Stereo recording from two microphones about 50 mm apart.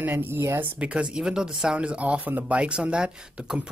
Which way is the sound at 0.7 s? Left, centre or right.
Right.